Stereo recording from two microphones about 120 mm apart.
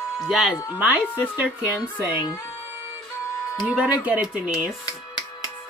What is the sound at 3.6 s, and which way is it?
Speech, 10° right (ahead or behind).